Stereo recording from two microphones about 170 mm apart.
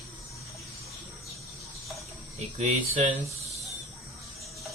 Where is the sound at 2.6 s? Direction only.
45° right (ahead or behind).